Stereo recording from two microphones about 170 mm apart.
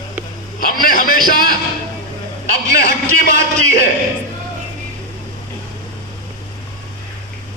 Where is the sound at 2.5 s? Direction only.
65° left (ahead or behind).